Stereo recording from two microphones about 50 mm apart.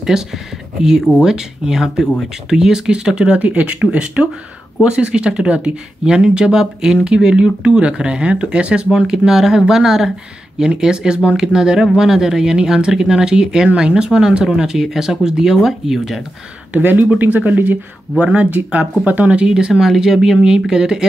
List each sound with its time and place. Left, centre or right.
0.1 s speech: centre
17.2 s speech: right
19.7 s speech: centre